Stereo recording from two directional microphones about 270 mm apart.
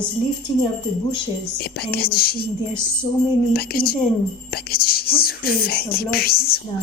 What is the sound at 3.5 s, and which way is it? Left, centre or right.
Speech, left.